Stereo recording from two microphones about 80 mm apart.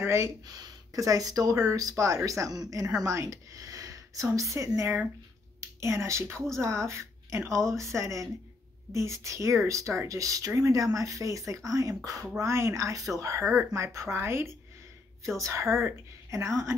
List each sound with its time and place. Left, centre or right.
0.0 s speech: right
0.5 s speech: right
13.4 s speech: right